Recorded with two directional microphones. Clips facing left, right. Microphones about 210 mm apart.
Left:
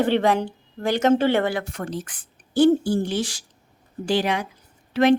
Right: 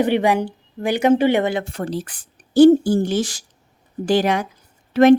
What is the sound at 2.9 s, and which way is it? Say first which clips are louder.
Speech: right 4 dB; 45° right (ahead or behind).